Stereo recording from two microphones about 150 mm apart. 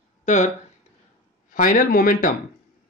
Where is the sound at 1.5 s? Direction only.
60° left (ahead or behind).